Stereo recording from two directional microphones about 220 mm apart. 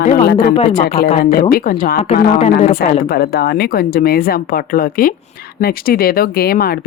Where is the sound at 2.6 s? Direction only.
45° left (ahead or behind).